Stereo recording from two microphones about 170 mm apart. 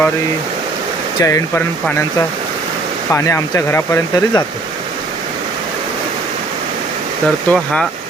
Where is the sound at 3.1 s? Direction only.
15° left (ahead or behind).